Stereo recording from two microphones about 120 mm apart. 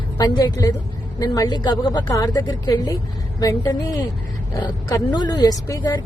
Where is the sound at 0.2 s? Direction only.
35° left (ahead or behind).